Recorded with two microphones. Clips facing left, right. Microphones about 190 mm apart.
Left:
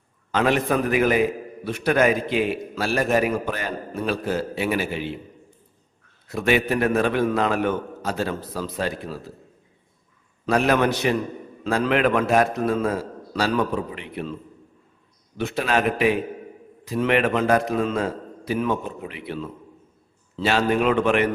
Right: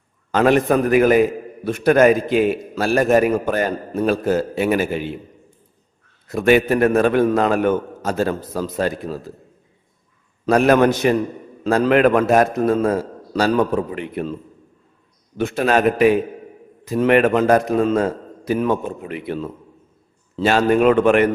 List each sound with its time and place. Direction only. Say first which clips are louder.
0.3 s a man's voice: right 6 dB; 45° right (ahead or behind)
6.2 s a man's voice: right 6 dB; 50° right (ahead or behind)
10.4 s a man's voice: right 6 dB; 45° right (ahead or behind)
15.4 s a man's voice: right 5 dB; 50° right (ahead or behind)